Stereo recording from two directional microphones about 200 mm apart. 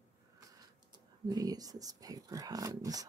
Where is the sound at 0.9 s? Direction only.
20° right (ahead or behind).